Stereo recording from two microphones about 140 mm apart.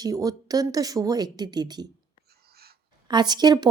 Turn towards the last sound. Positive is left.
turn(degrees=-30)  # may be behind; listen again after turning